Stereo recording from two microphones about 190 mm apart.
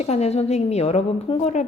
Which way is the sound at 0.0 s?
35° left (ahead or behind).